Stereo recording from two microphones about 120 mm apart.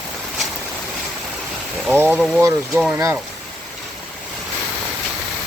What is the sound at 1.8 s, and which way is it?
Speech, 15° right (ahead or behind).